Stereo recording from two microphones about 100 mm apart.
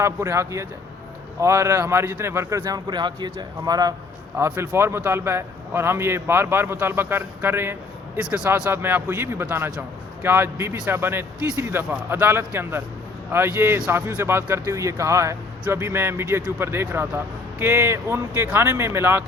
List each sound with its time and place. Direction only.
0.0 s a man's voice: 30° right (ahead or behind)
4.4 s a man's voice: 20° right (ahead or behind)
8.2 s speech: 10° right (ahead or behind)
8.7 s a man's voice: 20° right (ahead or behind)